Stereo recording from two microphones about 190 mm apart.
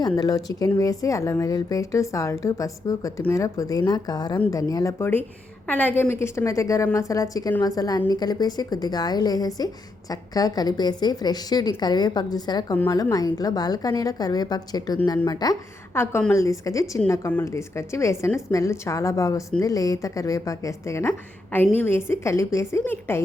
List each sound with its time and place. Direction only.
0.2 s a woman's voice: 20° left (ahead or behind)